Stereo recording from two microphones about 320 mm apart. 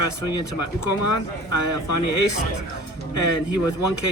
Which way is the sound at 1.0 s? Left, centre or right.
Left.